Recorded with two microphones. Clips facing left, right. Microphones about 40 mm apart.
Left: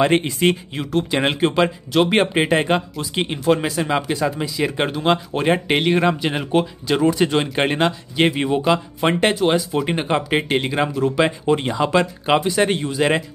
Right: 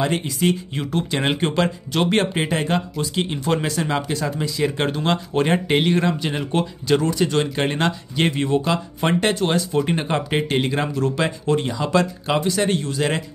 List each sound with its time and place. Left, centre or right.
0.0 s speech: left
1.3 s speech: centre
2.0 s speech: centre
2.4 s speech: left
3.0 s speech: centre
5.9 s speech: left
7.8 s speech: centre
11.2 s speech: left